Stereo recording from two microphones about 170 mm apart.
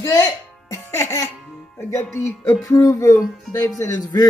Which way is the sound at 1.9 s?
15° left (ahead or behind).